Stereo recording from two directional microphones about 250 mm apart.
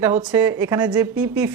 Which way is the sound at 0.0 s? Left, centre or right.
Centre.